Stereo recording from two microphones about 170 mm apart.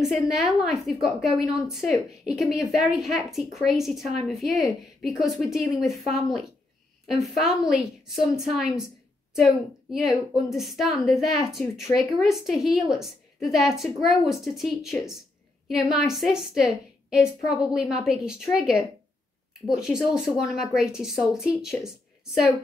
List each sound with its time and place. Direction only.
0.0 s speech: centre (ahead or behind)
7.3 s speech: centre (ahead or behind)
9.8 s speech: centre (ahead or behind)